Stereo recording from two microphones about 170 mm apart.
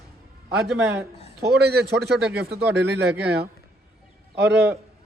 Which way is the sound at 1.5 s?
75° right (ahead or behind).